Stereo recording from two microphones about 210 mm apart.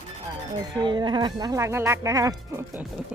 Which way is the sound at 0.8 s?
20° right (ahead or behind).